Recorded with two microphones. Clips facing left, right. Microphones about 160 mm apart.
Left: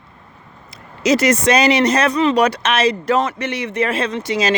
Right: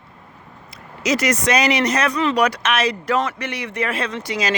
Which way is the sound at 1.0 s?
30° left (ahead or behind).